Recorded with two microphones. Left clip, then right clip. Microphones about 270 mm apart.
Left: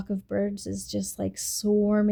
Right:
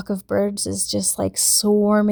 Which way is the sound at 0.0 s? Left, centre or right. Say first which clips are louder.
Right 8 dB; right.